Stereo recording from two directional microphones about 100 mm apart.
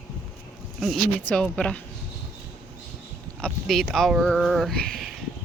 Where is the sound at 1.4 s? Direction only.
10° left (ahead or behind).